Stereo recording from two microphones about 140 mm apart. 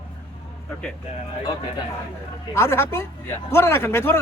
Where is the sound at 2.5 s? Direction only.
20° left (ahead or behind).